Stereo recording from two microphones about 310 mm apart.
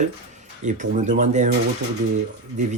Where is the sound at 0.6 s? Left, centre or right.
Right.